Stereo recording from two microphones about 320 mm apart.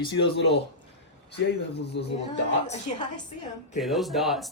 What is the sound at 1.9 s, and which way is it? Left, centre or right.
Speech, left.